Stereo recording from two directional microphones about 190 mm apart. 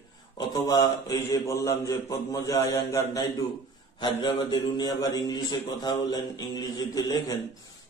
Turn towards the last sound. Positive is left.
turn(degrees=20)  # may be behind; listen again after turning